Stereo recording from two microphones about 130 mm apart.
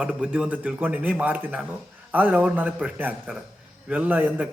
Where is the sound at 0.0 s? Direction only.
10° right (ahead or behind).